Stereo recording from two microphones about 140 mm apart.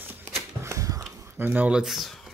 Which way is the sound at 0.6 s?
20° right (ahead or behind).